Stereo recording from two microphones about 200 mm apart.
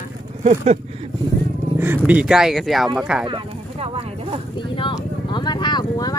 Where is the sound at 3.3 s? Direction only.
25° right (ahead or behind).